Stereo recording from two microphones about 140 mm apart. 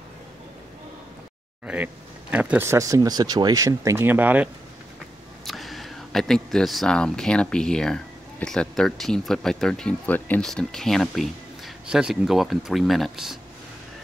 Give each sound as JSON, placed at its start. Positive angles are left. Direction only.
{"t": 1.7, "sound": "speech", "side_deg": -5}
{"t": 5.4, "sound": "speech", "side_deg": 0}